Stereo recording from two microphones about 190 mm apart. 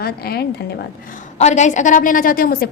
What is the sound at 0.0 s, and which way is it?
Speech, 55° left (ahead or behind).